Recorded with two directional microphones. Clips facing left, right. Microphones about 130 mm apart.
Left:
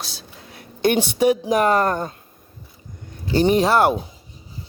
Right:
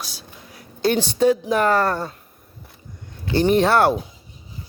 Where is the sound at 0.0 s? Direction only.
25° left (ahead or behind).